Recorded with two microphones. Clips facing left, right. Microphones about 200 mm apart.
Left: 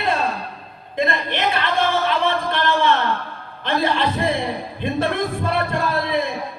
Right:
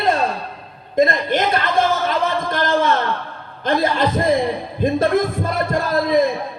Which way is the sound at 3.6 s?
40° right (ahead or behind).